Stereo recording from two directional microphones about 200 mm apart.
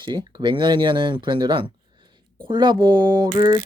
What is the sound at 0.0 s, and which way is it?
Speech, 20° right (ahead or behind).